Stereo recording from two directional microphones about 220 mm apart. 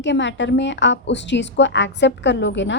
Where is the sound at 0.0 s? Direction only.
55° left (ahead or behind).